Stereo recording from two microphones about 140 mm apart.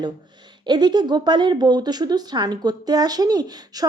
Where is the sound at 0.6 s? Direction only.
30° right (ahead or behind).